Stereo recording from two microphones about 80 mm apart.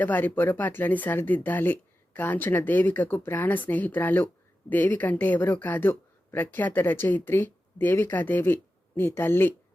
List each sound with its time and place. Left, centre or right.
0.0 s speech: left